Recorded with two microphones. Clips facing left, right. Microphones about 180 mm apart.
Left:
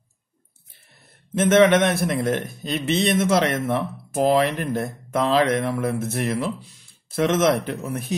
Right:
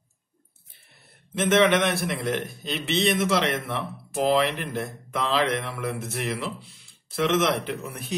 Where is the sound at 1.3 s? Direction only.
45° left (ahead or behind).